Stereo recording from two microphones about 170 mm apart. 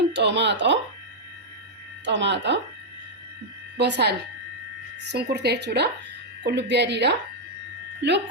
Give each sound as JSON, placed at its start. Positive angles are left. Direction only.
{"t": 0.1, "sound": "speech", "side_deg": -90}
{"t": 2.0, "sound": "speech", "side_deg": -90}
{"t": 3.8, "sound": "speech", "side_deg": -80}
{"t": 5.1, "sound": "speech", "side_deg": -75}